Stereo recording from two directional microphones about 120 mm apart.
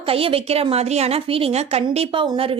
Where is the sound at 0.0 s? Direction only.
50° right (ahead or behind).